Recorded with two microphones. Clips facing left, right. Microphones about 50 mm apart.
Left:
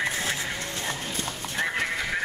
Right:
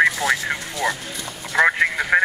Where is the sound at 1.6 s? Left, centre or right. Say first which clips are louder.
Right 11 dB; right.